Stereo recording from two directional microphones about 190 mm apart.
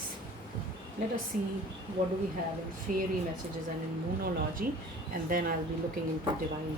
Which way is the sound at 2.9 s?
40° right (ahead or behind).